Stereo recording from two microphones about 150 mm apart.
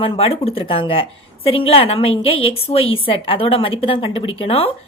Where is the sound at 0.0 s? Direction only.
35° left (ahead or behind).